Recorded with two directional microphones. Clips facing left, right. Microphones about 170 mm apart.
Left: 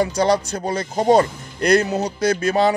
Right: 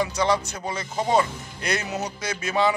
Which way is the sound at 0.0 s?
35° left (ahead or behind).